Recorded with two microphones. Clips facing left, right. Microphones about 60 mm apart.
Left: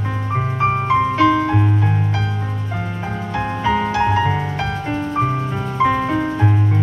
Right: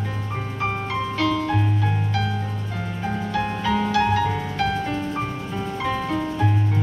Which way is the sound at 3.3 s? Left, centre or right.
Left.